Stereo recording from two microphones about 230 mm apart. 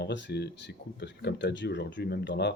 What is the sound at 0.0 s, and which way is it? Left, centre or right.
Speech, left.